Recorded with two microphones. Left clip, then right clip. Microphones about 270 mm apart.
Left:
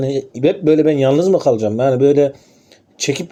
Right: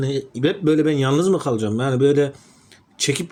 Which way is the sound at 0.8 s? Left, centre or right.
Right.